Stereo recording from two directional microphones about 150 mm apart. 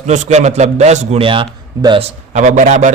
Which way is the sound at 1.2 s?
35° right (ahead or behind).